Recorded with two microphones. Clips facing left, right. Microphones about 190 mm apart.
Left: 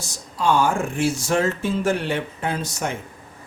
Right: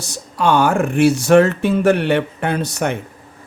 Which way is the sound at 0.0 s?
70° right (ahead or behind).